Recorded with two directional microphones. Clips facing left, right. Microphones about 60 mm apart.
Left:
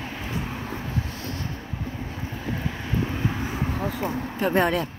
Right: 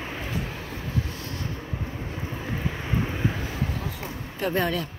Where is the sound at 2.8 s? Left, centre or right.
Centre.